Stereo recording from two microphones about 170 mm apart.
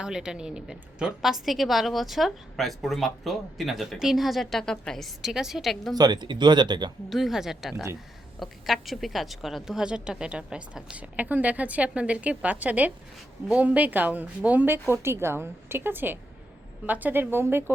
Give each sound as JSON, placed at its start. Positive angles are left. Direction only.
{"t": 0.0, "sound": "a woman's voice", "side_deg": -5}
{"t": 6.0, "sound": "speech", "side_deg": -25}
{"t": 7.1, "sound": "a woman's voice", "side_deg": 0}